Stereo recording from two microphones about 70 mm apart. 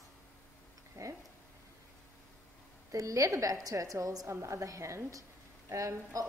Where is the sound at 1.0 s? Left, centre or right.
Right.